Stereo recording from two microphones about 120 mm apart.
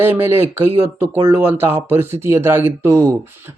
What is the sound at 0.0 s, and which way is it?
Speech, 20° right (ahead or behind).